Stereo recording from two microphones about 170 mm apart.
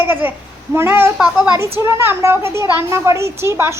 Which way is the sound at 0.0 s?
10° right (ahead or behind).